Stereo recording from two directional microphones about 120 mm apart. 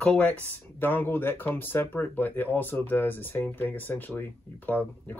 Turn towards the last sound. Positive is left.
turn(degrees=15)  # may be behind; listen again after turning